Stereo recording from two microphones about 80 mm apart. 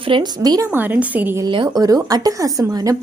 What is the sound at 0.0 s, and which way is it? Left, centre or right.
Speech, right.